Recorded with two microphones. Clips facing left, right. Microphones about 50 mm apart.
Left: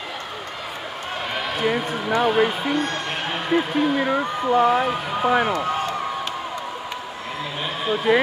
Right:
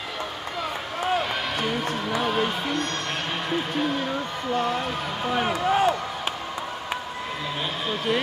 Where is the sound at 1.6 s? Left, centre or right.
Centre.